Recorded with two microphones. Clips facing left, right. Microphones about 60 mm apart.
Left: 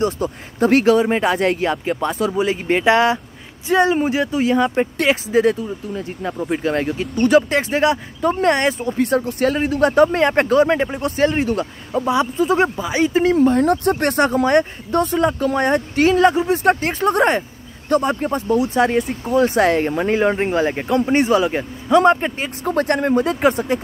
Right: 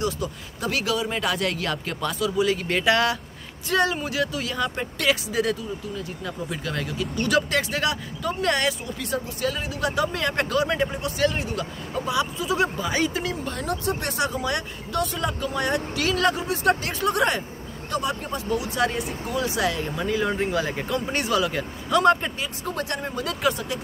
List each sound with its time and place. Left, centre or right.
0.0 s speech: left
12.8 s speech: centre
13.1 s speech: left
22.4 s speech: left